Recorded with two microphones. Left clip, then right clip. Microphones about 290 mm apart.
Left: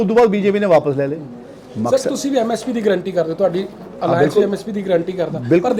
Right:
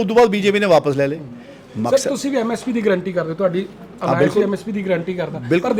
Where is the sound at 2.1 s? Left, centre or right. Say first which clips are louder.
Left 2 dB; right.